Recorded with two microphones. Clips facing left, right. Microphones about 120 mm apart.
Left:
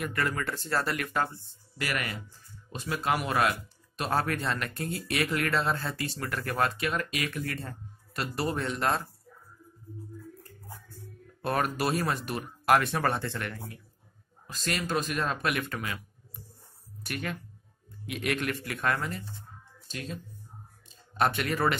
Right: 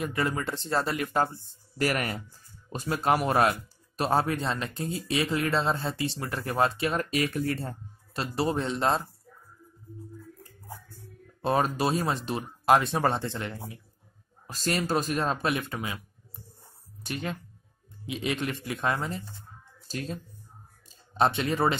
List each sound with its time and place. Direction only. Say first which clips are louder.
0.0 s speech: right 2 dB; 20° right (ahead or behind); by 4.1 s 40° right (ahead or behind)
4.1 s speech: right 2 dB; 25° right (ahead or behind)
11.4 s speech: right 3 dB; 25° right (ahead or behind)
14.5 s speech: right 3 dB; 35° right (ahead or behind)
17.0 s speech: right 2 dB; 25° right (ahead or behind)
19.9 s speech: right 4 dB; 35° right (ahead or behind)
21.1 s speech: right 2 dB; 25° right (ahead or behind)